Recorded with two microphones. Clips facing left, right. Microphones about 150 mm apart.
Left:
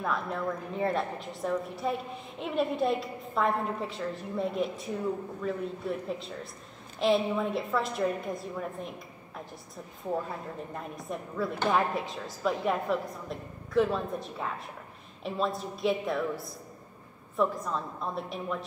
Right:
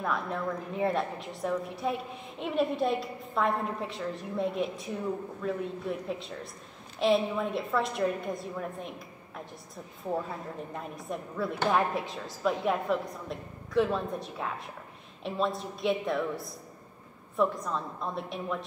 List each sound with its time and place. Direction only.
0.0 s a woman's voice: centre (ahead or behind)
10.7 s a woman's voice: centre (ahead or behind)